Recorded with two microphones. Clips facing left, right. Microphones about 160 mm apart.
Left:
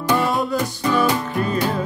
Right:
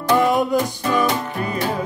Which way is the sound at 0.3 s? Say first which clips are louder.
Right 3 dB; 15° right (ahead or behind).